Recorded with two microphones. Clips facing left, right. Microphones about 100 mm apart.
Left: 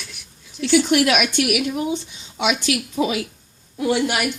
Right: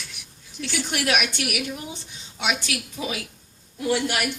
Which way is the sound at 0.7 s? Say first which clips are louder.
Left 9 dB; 90° left.